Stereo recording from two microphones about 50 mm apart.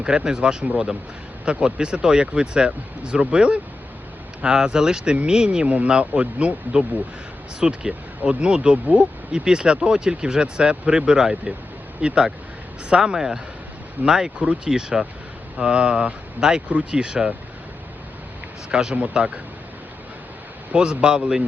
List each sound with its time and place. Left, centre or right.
0.0 s speech: centre
14.3 s speech: right
14.7 s speech: centre
16.6 s speech: right
18.7 s speech: centre
18.9 s speech: right
20.7 s speech: right